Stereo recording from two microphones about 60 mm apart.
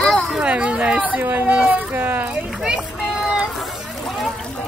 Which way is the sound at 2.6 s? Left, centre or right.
Centre.